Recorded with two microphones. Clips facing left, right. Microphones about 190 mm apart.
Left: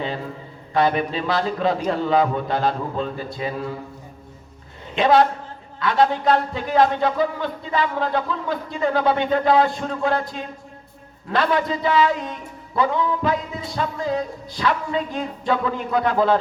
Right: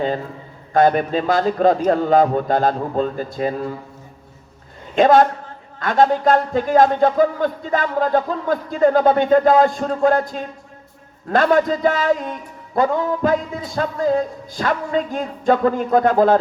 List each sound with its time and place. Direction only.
0.7 s a man's voice: 45° right (ahead or behind)
4.9 s a man's voice: 45° right (ahead or behind)